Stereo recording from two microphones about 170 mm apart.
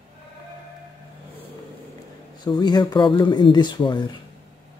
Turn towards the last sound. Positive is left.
turn(degrees=25)  # may be behind; listen again after turning